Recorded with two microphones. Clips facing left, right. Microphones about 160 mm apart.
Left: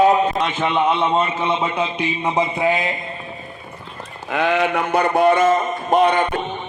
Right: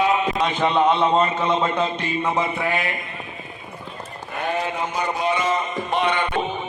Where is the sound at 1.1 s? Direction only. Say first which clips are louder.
Even; 5° left (ahead or behind).